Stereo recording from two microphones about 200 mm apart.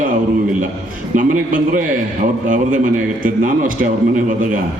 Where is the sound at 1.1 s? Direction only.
45° right (ahead or behind).